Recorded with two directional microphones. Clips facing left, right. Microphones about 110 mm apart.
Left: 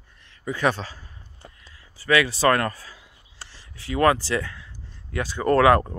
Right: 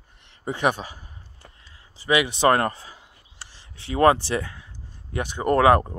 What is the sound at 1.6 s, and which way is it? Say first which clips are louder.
Speech: left 1 dB; 25° right (ahead or behind).